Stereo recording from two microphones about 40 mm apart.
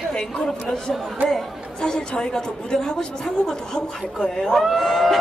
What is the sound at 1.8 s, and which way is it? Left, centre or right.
Speech, left.